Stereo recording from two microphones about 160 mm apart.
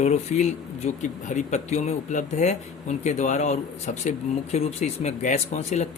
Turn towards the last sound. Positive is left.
turn(degrees=45)  # may be behind; listen again after turning